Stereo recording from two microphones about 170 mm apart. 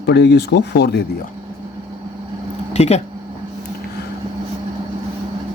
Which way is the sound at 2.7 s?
40° left (ahead or behind).